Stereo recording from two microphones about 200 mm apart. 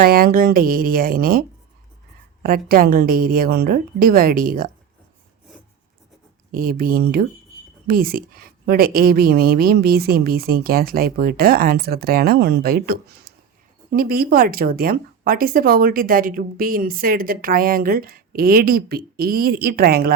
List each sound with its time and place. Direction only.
0.0 s speech: 50° right (ahead or behind)
6.5 s speech: 45° right (ahead or behind)